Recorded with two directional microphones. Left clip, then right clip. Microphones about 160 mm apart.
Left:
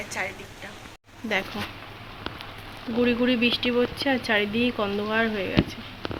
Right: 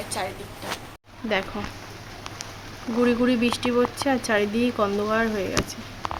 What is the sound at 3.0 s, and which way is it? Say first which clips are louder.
Speech: right 1 dB; 5° right (ahead or behind).